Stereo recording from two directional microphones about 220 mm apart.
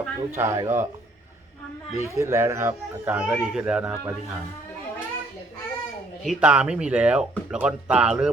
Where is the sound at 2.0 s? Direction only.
10° right (ahead or behind).